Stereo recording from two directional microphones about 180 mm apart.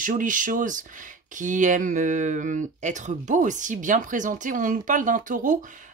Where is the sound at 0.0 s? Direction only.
45° right (ahead or behind).